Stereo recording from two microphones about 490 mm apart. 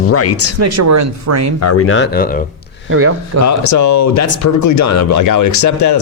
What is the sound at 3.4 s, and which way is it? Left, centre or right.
Speech, left.